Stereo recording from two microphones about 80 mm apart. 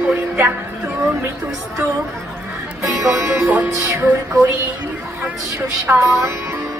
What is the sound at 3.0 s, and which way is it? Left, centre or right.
Speech, right.